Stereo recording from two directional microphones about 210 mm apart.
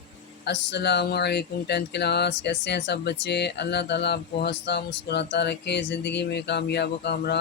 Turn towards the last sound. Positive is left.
turn(degrees=50)  # may be behind; listen again after turning